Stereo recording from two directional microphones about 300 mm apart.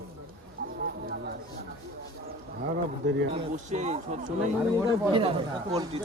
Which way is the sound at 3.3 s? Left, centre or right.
Right.